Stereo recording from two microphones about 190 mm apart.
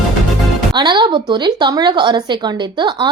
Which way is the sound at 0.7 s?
20° right (ahead or behind).